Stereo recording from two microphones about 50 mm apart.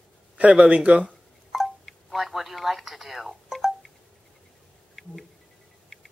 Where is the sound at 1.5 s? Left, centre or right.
Centre.